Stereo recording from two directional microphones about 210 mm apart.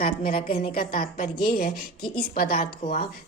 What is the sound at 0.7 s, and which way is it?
Speech, 45° left (ahead or behind).